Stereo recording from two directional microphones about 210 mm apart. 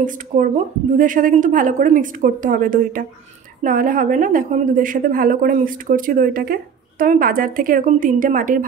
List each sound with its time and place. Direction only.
0.0 s a woman's voice: 40° right (ahead or behind)